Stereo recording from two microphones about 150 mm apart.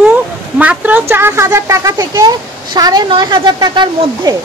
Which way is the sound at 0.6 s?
10° right (ahead or behind).